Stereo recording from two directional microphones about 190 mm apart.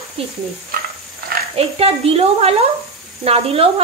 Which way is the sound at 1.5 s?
30° right (ahead or behind).